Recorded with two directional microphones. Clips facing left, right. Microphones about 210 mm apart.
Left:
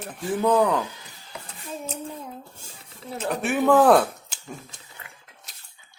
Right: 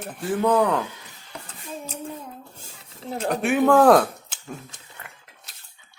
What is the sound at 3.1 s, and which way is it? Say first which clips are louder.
Speech: right 3 dB; 5° left (ahead or behind).